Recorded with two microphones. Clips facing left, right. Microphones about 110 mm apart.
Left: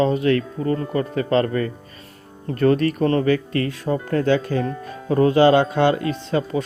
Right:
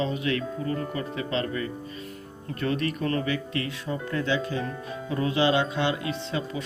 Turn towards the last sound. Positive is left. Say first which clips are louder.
# left 8 dB
turn(degrees=45)  # may be behind; listen again after turning